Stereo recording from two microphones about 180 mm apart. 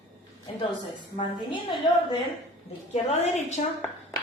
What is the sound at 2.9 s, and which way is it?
Speech, 35° left (ahead or behind).